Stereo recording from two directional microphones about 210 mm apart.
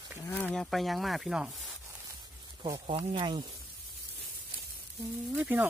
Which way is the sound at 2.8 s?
30° right (ahead or behind).